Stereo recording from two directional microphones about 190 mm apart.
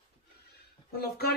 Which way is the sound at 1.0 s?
55° left (ahead or behind).